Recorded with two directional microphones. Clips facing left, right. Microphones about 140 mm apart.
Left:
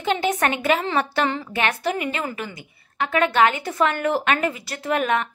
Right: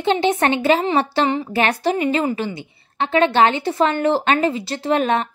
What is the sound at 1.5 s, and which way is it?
A woman's voice, 35° right (ahead or behind).